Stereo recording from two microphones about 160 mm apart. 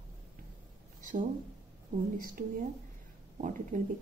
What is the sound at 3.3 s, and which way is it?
Speech, 55° right (ahead or behind).